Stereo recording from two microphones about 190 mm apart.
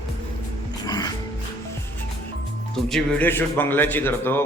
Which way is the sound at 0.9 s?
20° left (ahead or behind).